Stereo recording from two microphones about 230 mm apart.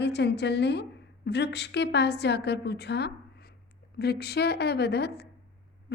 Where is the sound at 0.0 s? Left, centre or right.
Left.